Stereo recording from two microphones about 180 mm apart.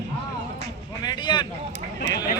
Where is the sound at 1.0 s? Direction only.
25° left (ahead or behind).